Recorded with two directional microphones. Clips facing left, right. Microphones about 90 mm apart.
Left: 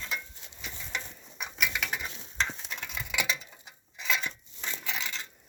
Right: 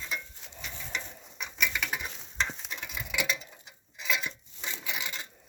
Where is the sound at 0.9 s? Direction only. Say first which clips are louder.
Left 1 dB; 10° left (ahead or behind).